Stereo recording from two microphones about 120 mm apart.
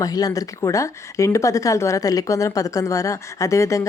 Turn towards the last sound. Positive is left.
turn(degrees=25)  # may be behind; listen again after turning